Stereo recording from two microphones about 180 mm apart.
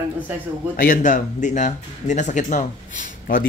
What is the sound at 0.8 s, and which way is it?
Speech, 50° left (ahead or behind).